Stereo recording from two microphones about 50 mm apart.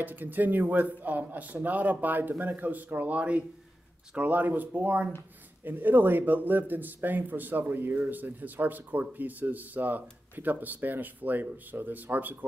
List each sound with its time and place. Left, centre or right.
0.0 s a man's voice: right